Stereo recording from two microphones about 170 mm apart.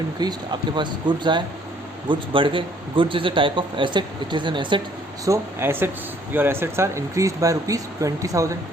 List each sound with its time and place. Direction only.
0.2 s a man's voice: 25° right (ahead or behind)
5.2 s a man's voice: 15° right (ahead or behind)